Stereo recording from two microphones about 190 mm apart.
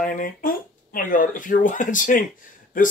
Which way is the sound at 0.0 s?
45° left (ahead or behind).